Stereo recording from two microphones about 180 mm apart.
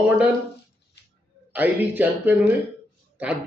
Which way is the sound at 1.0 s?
70° left (ahead or behind).